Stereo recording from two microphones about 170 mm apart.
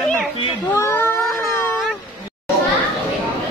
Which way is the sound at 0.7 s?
15° left (ahead or behind).